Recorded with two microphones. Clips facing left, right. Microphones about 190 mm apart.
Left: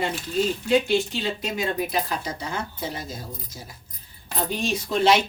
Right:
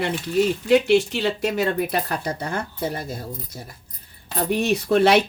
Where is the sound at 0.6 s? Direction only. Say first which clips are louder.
Right 5 dB; 70° right (ahead or behind).